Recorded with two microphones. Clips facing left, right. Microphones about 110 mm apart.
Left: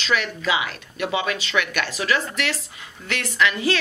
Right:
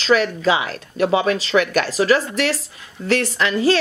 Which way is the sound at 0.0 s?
35° right (ahead or behind).